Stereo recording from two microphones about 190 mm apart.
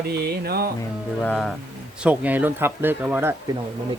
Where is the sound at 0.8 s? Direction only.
5° left (ahead or behind).